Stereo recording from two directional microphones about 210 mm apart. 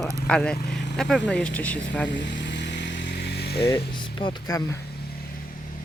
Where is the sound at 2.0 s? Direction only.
55° left (ahead or behind).